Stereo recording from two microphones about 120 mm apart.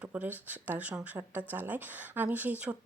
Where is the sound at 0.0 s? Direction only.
15° right (ahead or behind).